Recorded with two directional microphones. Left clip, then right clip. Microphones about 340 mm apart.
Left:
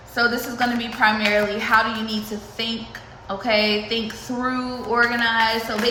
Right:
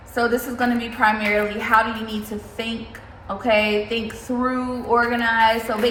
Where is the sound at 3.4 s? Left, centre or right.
Centre.